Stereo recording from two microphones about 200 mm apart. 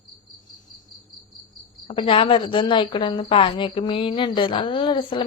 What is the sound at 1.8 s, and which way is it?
A woman's voice, 25° left (ahead or behind).